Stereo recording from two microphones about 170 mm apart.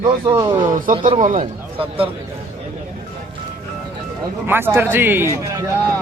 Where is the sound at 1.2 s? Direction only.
50° right (ahead or behind).